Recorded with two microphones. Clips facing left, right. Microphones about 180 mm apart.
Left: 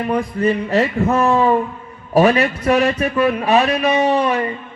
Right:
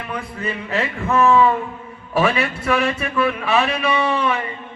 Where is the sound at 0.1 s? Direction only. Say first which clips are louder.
Left 9 dB; 40° left (ahead or behind).